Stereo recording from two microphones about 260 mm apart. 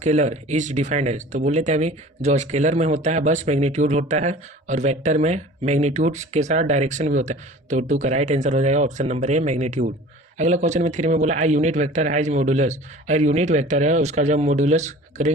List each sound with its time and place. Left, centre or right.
0.0 s speech: right